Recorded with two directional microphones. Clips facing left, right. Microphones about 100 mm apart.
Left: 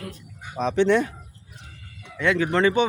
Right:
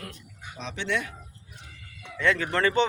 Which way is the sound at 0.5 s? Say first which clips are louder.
Left 11 dB; 45° left (ahead or behind).